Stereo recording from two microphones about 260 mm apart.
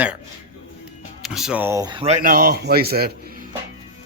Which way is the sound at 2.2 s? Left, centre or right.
Right.